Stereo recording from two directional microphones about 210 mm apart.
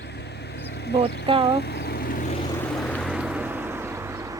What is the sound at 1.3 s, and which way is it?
Speech, 25° right (ahead or behind).